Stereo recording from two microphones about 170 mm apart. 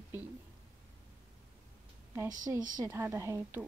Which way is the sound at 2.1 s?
15° right (ahead or behind).